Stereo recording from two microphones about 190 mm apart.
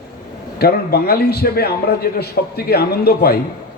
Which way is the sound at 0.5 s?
55° left (ahead or behind).